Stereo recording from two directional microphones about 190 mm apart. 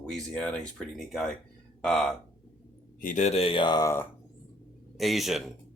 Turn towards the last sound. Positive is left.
turn(degrees=0)  # may be behind; listen again after turning